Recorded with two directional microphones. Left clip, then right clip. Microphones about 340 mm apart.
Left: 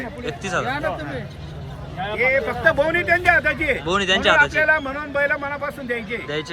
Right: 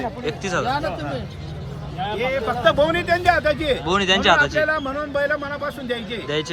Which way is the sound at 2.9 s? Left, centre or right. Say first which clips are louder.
Left 1 dB; right.